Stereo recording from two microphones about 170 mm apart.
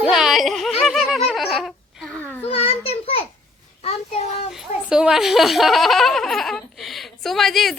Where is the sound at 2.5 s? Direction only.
35° left (ahead or behind).